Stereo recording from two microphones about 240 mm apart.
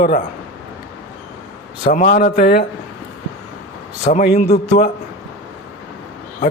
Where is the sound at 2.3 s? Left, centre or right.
Left.